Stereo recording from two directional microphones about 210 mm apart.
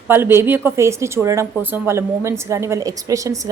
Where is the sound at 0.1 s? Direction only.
10° right (ahead or behind).